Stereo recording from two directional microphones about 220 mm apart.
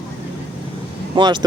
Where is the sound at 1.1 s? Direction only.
20° right (ahead or behind).